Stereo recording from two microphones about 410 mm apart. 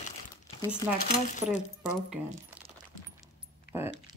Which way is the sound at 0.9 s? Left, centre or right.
Centre.